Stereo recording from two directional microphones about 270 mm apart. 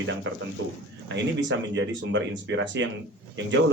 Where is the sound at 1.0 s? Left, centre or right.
Right.